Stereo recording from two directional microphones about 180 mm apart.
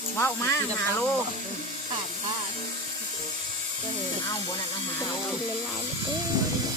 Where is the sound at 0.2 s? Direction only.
15° left (ahead or behind).